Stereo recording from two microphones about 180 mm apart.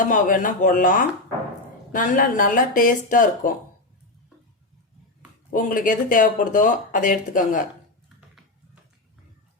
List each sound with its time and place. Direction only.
0.0 s speech: 50° left (ahead or behind)
5.5 s speech: 50° left (ahead or behind)